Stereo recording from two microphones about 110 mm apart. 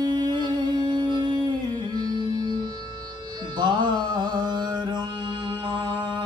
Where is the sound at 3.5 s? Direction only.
45° right (ahead or behind).